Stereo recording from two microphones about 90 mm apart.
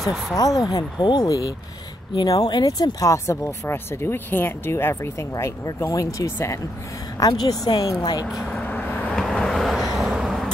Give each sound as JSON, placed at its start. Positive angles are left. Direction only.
{"t": 0.6, "sound": "speech", "side_deg": 45}
{"t": 3.1, "sound": "speech", "side_deg": 30}
{"t": 7.2, "sound": "speech", "side_deg": 45}
{"t": 8.5, "sound": "vehicle", "side_deg": 15}
{"t": 9.1, "sound": "vehicle", "side_deg": 0}